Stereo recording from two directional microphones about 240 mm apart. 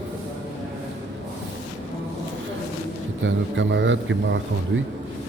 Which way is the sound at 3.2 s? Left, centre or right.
Right.